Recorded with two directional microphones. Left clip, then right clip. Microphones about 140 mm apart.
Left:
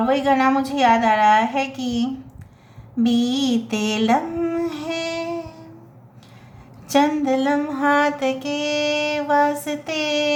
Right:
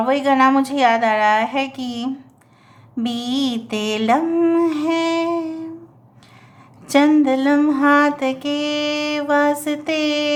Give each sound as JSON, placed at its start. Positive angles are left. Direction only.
{"t": 0.0, "sound": "music", "side_deg": -35}
{"t": 6.8, "sound": "music", "side_deg": -40}